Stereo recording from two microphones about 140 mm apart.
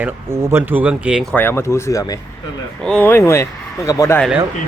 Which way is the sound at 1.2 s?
10° left (ahead or behind).